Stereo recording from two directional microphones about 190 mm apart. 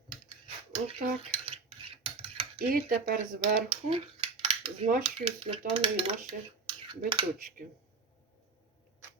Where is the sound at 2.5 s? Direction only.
50° right (ahead or behind).